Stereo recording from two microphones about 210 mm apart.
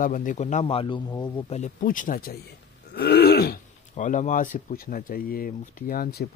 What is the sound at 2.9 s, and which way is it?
Throat clearing, 50° left (ahead or behind).